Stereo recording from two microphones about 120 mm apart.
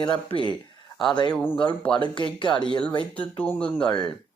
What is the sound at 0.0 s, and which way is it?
Speech, 45° left (ahead or behind).